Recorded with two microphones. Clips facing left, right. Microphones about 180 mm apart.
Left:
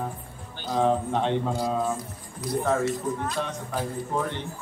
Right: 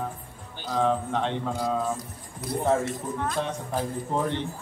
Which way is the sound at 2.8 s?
50° right (ahead or behind).